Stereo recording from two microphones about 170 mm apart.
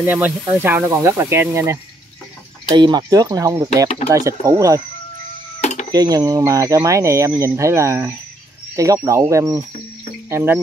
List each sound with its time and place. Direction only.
0.0 s speech: 10° right (ahead or behind)
5.6 s sewing machine: 45° left (ahead or behind)
5.9 s speech: 20° right (ahead or behind)